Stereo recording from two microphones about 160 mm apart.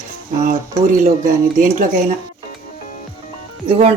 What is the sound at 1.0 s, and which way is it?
Speech, 55° right (ahead or behind).